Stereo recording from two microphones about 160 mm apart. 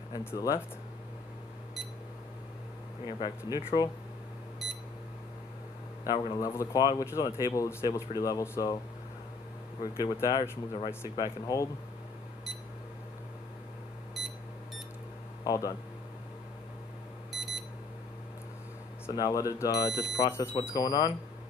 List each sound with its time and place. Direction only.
0.1 s speech: 20° left (ahead or behind)
3.1 s speech: 30° left (ahead or behind)
4.6 s alarm clock: centre (ahead or behind)
6.0 s speech: 30° left (ahead or behind)
10.0 s speech: 20° left (ahead or behind)
14.2 s beep: centre (ahead or behind)
15.4 s speech: 20° left (ahead or behind)
17.3 s alarm clock: centre (ahead or behind)
19.0 s speech: 20° left (ahead or behind)